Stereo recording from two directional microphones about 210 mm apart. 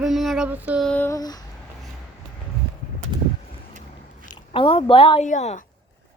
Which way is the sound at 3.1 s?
20° right (ahead or behind).